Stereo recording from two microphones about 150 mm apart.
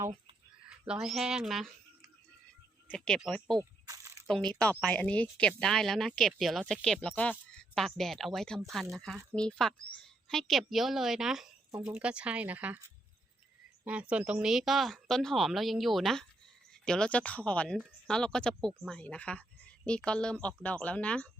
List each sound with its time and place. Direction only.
0.9 s speech: centre (ahead or behind)
2.8 s speech: 5° left (ahead or behind)
3.6 s a sound: 20° right (ahead or behind)
4.3 s speech: 5° left (ahead or behind)
13.8 s speech: 10° right (ahead or behind); by 21.2 s 10° left (ahead or behind)